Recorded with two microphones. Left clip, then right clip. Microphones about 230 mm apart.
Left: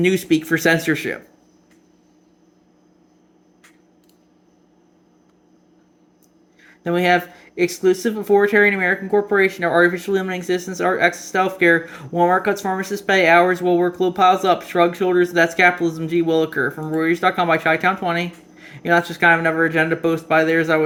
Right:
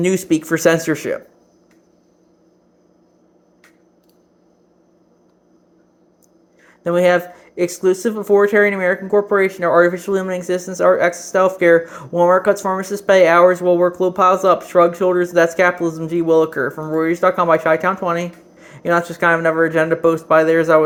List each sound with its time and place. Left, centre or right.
0.0 s speech: left
6.6 s speech: centre